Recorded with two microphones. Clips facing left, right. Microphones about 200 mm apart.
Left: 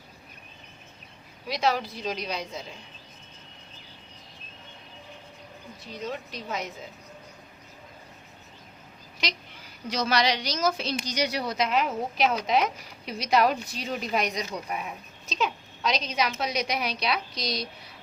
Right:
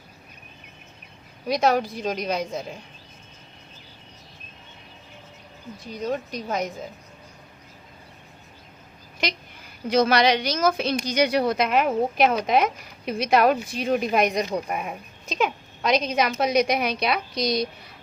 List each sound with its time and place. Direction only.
1.5 s speech: 50° right (ahead or behind)
5.9 s speech: 45° right (ahead or behind)
9.2 s speech: 50° right (ahead or behind)